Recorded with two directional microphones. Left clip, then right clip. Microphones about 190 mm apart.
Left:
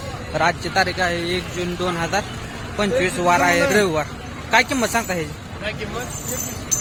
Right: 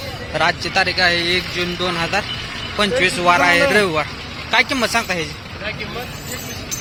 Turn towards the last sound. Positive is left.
turn(degrees=10)  # may be behind; listen again after turning